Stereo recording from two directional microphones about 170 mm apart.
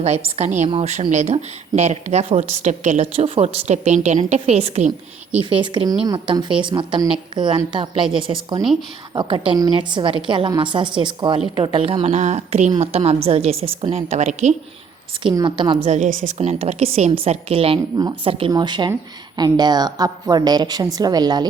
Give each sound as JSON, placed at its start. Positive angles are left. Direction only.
{"t": 0.3, "sound": "a woman's voice", "side_deg": -45}
{"t": 12.0, "sound": "a woman's voice", "side_deg": -45}
{"t": 15.2, "sound": "a woman's voice", "side_deg": -25}
{"t": 15.8, "sound": "a woman's voice", "side_deg": -45}